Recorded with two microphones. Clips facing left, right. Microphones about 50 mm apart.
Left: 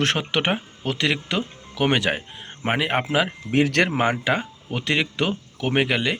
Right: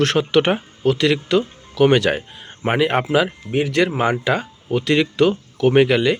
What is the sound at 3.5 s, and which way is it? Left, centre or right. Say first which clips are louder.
Speech: right 1 dB; left.